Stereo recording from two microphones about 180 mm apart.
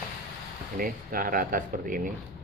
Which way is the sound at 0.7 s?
55° right (ahead or behind).